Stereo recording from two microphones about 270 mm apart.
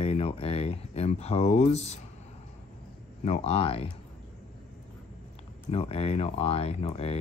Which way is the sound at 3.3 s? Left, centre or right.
Left.